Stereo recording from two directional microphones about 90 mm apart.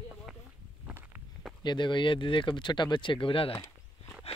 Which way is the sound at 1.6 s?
60° left (ahead or behind).